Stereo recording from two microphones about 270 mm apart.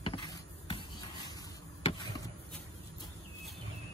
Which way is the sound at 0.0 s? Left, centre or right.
Centre.